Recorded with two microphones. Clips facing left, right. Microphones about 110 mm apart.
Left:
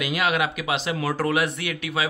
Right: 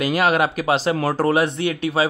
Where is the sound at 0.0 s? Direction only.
40° right (ahead or behind).